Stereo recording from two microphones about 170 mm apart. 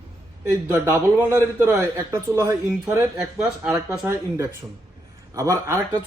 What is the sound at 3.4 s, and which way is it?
Speech, 5° right (ahead or behind).